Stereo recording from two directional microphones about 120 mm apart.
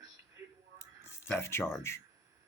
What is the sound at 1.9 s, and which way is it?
Speech, 20° left (ahead or behind).